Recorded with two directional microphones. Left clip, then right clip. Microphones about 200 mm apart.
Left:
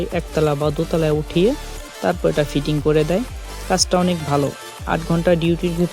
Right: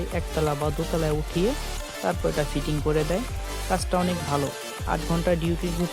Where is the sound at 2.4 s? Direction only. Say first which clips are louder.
Left 7 dB; 35° left (ahead or behind).